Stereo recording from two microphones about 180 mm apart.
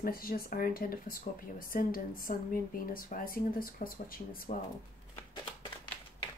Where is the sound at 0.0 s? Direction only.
55° left (ahead or behind).